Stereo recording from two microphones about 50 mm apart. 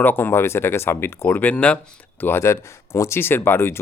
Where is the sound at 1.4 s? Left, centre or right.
Left.